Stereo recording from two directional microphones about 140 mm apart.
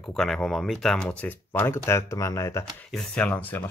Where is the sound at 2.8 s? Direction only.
5° left (ahead or behind).